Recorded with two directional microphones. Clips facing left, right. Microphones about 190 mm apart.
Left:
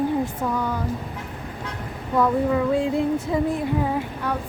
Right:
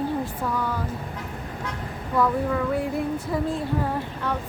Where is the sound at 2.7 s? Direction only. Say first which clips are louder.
Left 4 dB; 25° left (ahead or behind).